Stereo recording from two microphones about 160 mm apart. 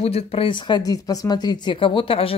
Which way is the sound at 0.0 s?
35° left (ahead or behind).